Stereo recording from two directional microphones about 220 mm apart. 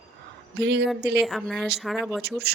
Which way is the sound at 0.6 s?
50° right (ahead or behind).